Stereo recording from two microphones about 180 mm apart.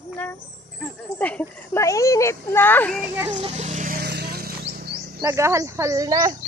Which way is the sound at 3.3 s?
40° right (ahead or behind).